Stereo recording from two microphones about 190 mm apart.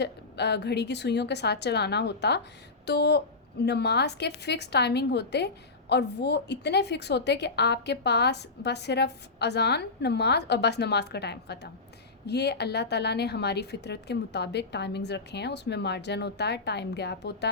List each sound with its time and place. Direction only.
0.0 s a woman's voice: 60° left (ahead or behind)